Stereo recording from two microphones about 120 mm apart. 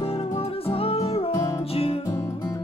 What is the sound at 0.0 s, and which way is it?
Music, 55° left (ahead or behind).